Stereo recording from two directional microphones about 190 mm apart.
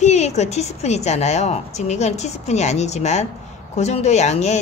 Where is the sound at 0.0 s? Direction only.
35° left (ahead or behind).